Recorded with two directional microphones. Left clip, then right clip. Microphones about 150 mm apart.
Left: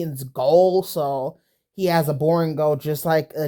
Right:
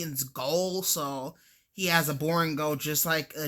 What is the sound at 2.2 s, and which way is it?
Speech, 35° left (ahead or behind).